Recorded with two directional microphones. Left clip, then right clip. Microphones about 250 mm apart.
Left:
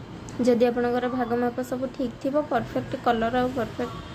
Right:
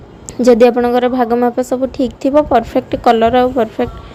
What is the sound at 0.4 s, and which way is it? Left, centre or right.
A woman's voice, right.